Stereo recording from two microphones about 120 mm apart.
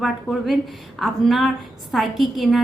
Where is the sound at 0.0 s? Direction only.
Centre (ahead or behind).